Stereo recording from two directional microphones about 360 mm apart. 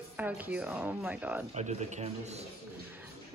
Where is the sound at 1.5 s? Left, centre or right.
Centre.